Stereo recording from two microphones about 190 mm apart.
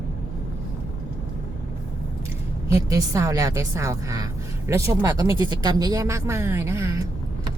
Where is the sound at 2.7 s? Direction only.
15° right (ahead or behind).